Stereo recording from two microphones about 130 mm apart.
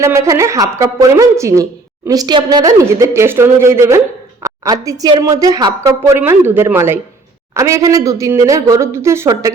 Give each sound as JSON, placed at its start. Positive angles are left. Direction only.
{"t": 0.0, "sound": "a woman's voice", "side_deg": -20}
{"t": 6.0, "sound": "a woman's voice", "side_deg": -15}